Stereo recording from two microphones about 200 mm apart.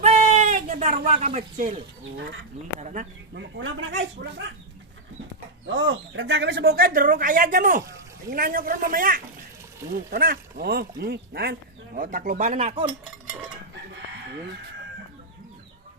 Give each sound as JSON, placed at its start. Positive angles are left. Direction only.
{"t": 0.0, "sound": "a sound", "side_deg": -30}
{"t": 2.8, "sound": "speech", "side_deg": -35}
{"t": 3.3, "sound": "speech", "side_deg": -70}
{"t": 5.6, "sound": "speech", "side_deg": -70}
{"t": 11.9, "sound": "speech", "side_deg": -40}